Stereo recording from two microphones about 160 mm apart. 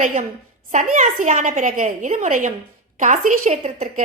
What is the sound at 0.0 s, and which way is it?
A woman's voice, 50° right (ahead or behind).